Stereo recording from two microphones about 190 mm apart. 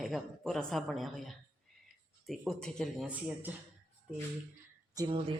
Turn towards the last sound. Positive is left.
turn(degrees=-25)  # may be behind; listen again after turning